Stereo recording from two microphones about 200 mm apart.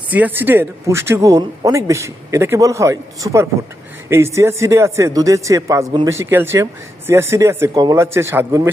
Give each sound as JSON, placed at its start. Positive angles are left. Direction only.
{"t": 0.1, "sound": "speech", "side_deg": -10}